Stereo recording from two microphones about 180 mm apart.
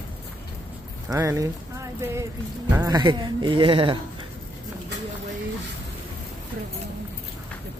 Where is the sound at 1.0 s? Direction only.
20° right (ahead or behind).